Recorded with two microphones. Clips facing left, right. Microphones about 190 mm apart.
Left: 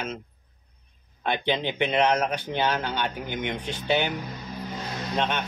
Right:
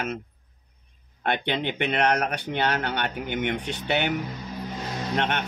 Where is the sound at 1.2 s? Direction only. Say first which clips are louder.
Even; 60° right (ahead or behind).